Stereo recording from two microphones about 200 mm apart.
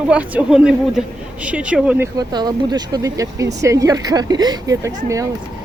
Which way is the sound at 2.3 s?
20° right (ahead or behind).